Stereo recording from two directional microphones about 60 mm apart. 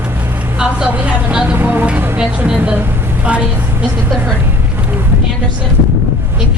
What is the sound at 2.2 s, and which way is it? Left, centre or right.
Speech, centre.